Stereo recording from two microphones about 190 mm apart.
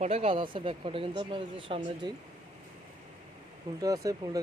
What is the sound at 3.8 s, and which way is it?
Speech, 20° right (ahead or behind).